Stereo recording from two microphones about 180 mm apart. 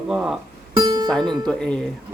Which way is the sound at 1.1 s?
Centre (ahead or behind).